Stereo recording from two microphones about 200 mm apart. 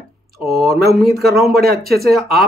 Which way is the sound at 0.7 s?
50° right (ahead or behind).